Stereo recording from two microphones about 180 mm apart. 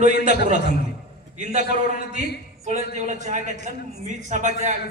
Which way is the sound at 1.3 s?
40° right (ahead or behind).